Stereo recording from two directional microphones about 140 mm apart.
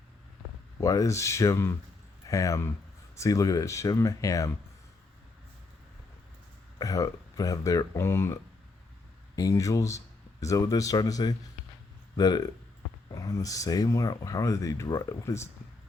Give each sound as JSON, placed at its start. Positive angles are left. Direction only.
{"t": 0.8, "sound": "speech", "side_deg": 25}
{"t": 6.7, "sound": "speech", "side_deg": 25}